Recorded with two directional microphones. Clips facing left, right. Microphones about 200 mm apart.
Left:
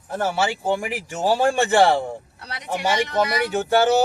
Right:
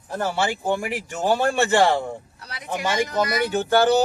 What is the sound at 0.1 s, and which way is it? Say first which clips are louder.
Speech: left 1 dB; 5° left (ahead or behind).